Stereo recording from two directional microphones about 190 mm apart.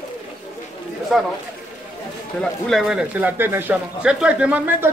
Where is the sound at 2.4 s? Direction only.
Centre (ahead or behind).